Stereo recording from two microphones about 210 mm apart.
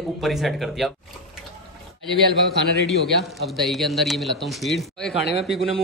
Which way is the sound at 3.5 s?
Centre (ahead or behind).